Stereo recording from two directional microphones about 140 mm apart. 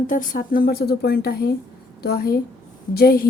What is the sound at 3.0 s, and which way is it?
Speech, 90° left.